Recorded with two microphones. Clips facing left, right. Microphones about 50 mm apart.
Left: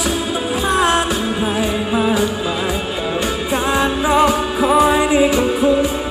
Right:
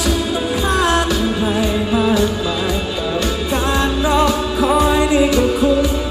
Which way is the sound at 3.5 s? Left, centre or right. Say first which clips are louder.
Left 1 dB; left.